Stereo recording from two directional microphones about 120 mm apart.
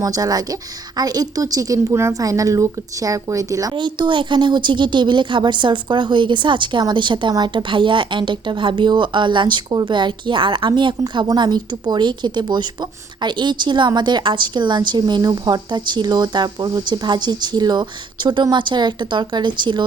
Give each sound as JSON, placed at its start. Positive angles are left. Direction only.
{"t": 0.0, "sound": "a woman's voice", "side_deg": -30}